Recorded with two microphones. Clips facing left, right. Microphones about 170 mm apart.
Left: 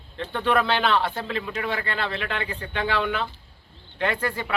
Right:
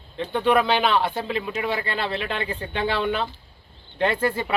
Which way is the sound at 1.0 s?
20° right (ahead or behind).